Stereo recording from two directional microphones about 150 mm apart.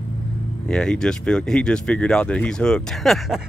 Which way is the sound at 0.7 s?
5° left (ahead or behind).